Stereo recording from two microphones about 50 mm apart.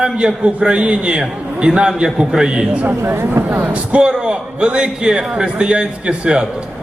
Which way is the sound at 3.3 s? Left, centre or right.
Right.